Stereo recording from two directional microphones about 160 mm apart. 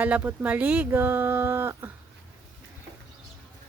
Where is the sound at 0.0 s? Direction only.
10° right (ahead or behind).